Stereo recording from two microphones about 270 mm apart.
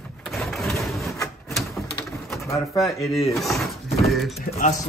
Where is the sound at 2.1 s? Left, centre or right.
Centre.